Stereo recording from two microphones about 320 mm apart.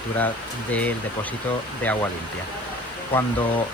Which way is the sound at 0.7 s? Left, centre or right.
Centre.